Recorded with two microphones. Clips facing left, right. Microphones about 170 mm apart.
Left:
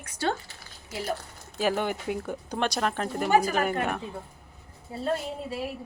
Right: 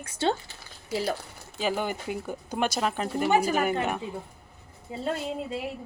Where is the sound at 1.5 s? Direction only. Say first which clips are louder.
Left 2 dB; centre (ahead or behind).